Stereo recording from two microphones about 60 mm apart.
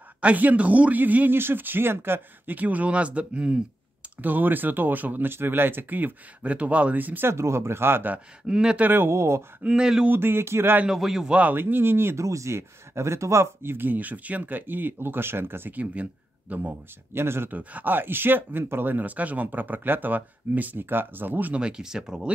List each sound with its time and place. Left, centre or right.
0.2 s a man's voice: right
7.2 s speech: right
8.5 s speech: centre
8.8 s speech: right
9.7 s speech: centre
10.0 s speech: right
10.9 s speech: centre
11.5 s speech: right
12.3 s speech: right
15.8 s speech: right
17.5 s speech: right
21.5 s speech: centre